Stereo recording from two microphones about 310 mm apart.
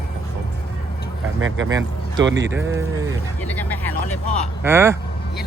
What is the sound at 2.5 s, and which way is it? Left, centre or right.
Speech, centre.